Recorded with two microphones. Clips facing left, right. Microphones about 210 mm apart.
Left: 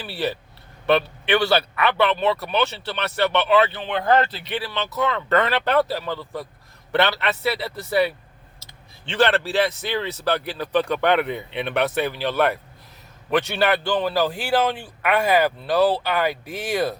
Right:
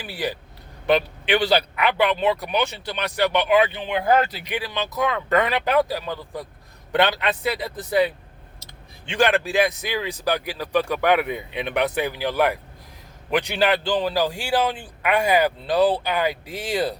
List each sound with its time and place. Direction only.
0.0 s a man's voice: 15° right (ahead or behind)